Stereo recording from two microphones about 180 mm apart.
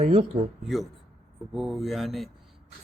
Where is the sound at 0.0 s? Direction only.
40° right (ahead or behind).